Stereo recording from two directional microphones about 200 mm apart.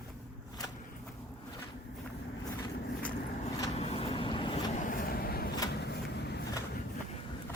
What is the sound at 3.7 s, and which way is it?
Vehicle, 30° left (ahead or behind).